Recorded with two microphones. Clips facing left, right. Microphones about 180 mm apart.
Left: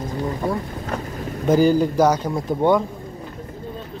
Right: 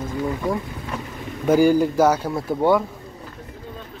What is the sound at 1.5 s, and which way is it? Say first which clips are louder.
Speech: even; 10° right (ahead or behind).